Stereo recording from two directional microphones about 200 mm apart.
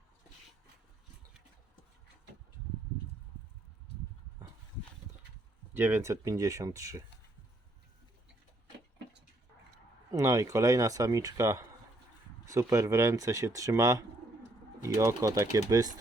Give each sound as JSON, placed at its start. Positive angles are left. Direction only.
{"t": 5.7, "sound": "speech", "side_deg": -10}
{"t": 10.1, "sound": "speech", "side_deg": -15}